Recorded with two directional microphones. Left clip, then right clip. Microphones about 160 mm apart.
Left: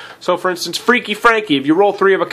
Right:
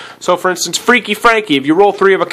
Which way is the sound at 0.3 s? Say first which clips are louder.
Right 4 dB; 25° right (ahead or behind).